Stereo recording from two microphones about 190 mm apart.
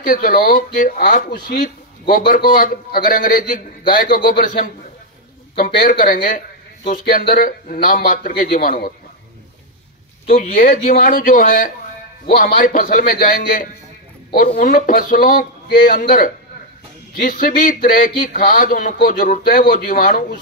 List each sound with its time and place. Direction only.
0.0 s speech: 45° left (ahead or behind)
5.6 s speech: 50° left (ahead or behind)
10.5 s speech: 50° left (ahead or behind)